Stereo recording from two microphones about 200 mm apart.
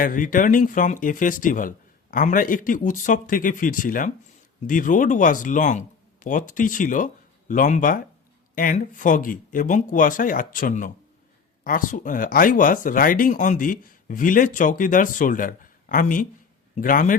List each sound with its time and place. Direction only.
0.0 s speech: 40° left (ahead or behind)